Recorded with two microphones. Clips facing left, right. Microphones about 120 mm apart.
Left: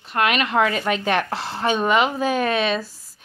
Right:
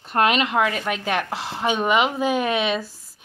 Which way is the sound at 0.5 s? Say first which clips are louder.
Left 2 dB; centre (ahead or behind).